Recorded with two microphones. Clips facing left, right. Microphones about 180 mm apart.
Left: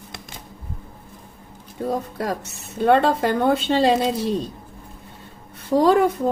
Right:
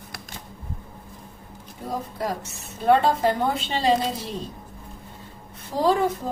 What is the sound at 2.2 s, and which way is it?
A woman's voice, 65° left (ahead or behind).